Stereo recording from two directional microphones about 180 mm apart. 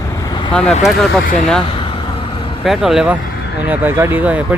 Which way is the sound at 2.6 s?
Centre (ahead or behind).